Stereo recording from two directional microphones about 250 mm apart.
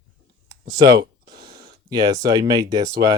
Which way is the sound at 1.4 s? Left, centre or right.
Right.